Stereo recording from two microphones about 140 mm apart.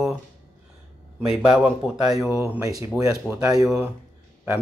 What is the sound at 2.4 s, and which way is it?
Speech, 15° right (ahead or behind).